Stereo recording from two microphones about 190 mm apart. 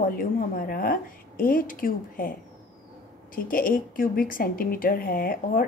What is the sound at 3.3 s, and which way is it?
A woman's voice, 45° left (ahead or behind).